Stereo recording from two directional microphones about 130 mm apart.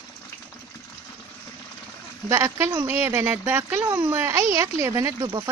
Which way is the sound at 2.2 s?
20° right (ahead or behind).